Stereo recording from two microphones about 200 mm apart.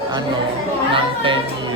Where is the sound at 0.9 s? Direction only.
25° right (ahead or behind).